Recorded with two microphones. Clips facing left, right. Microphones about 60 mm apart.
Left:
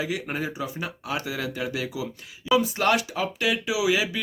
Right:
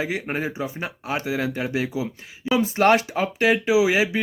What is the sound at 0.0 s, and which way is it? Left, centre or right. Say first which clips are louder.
Speech: right 3 dB; right.